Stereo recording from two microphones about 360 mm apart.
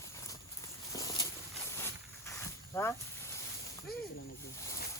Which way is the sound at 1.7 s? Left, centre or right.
Centre.